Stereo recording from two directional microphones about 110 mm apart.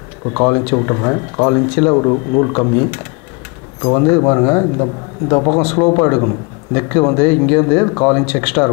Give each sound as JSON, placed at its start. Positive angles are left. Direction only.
{"t": 0.3, "sound": "speech", "side_deg": 20}